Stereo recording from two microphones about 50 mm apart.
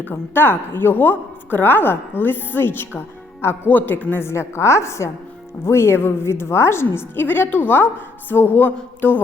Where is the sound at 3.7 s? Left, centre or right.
Left.